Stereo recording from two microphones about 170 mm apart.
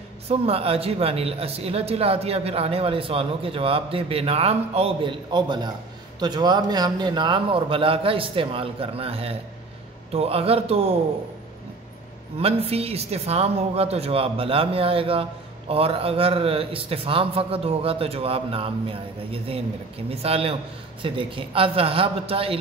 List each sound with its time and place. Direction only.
0.3 s speech: 35° right (ahead or behind)
12.4 s speech: 35° right (ahead or behind)